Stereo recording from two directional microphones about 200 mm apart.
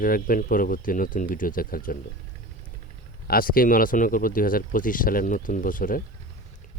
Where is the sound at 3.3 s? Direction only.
45° left (ahead or behind).